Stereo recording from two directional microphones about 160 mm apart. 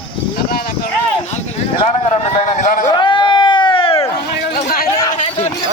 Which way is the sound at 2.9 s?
30° left (ahead or behind).